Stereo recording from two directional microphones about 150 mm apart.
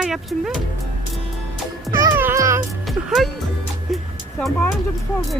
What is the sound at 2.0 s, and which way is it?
Music, 15° right (ahead or behind).